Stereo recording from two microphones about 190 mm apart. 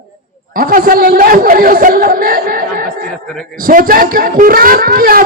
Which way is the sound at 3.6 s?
50° right (ahead or behind).